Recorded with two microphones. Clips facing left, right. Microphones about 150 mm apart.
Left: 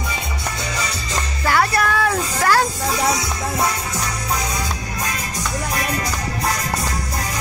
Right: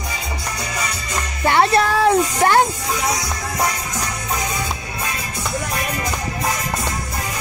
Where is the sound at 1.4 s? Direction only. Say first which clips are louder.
Right 3 dB; 25° right (ahead or behind).